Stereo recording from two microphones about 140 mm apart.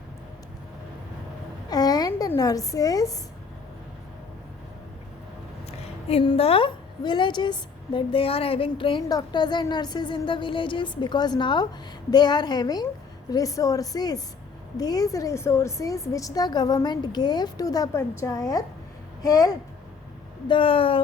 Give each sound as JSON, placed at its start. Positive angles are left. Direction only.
{"t": 1.7, "sound": "a woman's voice", "side_deg": 30}
{"t": 6.1, "sound": "a woman's voice", "side_deg": 45}
{"t": 20.5, "sound": "a woman's voice", "side_deg": 40}